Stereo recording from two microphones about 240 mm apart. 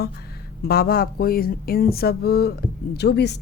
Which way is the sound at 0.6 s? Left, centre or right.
Left.